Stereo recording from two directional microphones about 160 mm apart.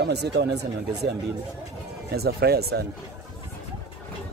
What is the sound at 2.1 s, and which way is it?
Speech, 80° right.